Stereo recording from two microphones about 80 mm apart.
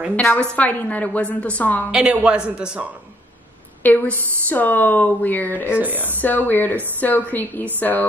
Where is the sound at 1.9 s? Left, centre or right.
Centre.